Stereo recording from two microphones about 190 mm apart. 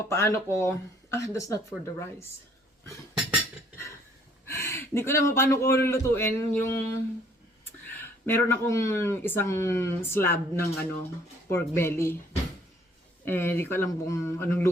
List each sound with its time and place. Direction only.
0.0 s speech: 15° left (ahead or behind)
4.4 s speech: 15° left (ahead or behind)
7.9 s speech: 10° left (ahead or behind)
13.2 s speech: 10° left (ahead or behind)